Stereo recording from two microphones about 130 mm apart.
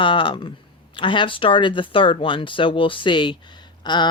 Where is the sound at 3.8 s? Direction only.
35° left (ahead or behind).